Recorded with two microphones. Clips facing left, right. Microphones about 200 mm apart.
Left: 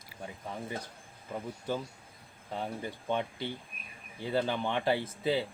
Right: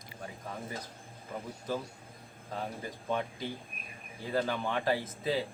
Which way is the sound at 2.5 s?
25° left (ahead or behind).